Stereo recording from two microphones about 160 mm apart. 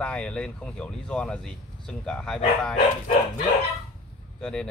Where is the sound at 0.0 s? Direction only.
5° left (ahead or behind).